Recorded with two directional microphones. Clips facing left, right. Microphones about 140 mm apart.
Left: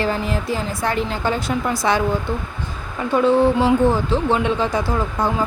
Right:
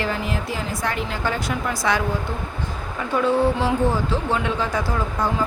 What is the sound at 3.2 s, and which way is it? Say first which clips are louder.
A woman's voice: left 4 dB; 20° left (ahead or behind).